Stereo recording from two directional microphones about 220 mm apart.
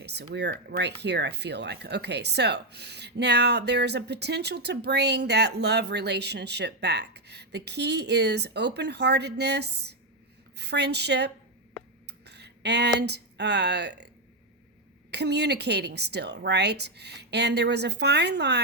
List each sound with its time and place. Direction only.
0.0 s speech: 50° right (ahead or behind)
15.1 s speech: 50° right (ahead or behind)